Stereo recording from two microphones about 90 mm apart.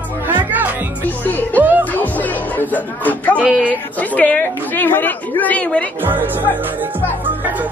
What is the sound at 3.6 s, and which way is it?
Speech, 15° left (ahead or behind).